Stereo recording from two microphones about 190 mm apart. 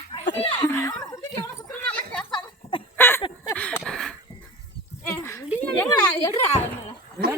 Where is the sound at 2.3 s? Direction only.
25° left (ahead or behind).